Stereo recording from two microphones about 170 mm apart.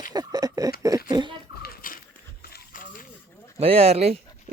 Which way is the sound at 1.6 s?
55° left (ahead or behind).